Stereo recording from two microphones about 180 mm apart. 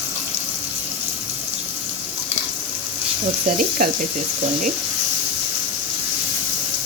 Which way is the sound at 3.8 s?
55° right (ahead or behind).